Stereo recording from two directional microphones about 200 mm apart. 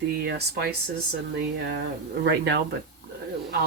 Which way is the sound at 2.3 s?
55° right (ahead or behind).